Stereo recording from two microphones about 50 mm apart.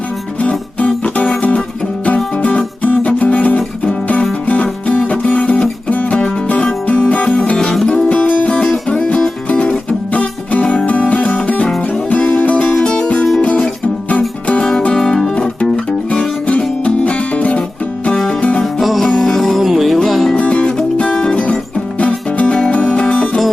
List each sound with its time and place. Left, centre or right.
0.3 s music: left
12.7 s music: centre
14.6 s music: centre
15.7 s music: left
18.6 s music: centre
20.4 s music: left